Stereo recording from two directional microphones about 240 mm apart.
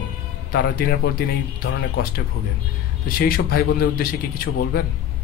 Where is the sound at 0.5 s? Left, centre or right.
Left.